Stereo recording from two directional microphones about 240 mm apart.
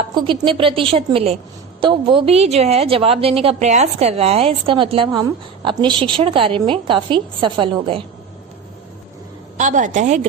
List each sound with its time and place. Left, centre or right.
0.1 s a woman's voice: centre
9.6 s a woman's voice: right